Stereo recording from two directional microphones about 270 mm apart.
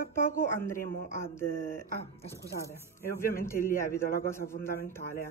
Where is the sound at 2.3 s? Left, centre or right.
Centre.